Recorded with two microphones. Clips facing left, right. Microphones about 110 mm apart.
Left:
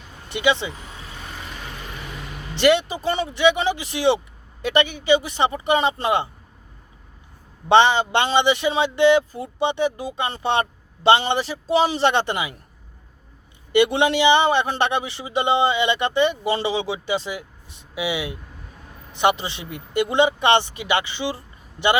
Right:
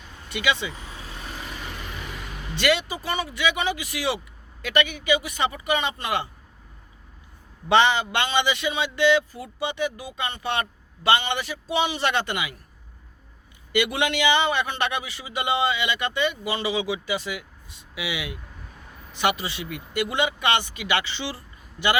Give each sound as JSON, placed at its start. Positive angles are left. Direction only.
{"t": 0.3, "sound": "a man's voice", "side_deg": 25}
{"t": 2.6, "sound": "a man's voice", "side_deg": 25}
{"t": 7.7, "sound": "a man's voice", "side_deg": 25}
{"t": 13.7, "sound": "a man's voice", "side_deg": 30}